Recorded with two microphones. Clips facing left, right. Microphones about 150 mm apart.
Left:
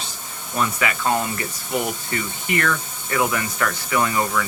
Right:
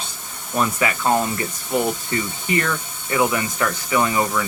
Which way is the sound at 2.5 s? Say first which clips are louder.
Even; 20° right (ahead or behind).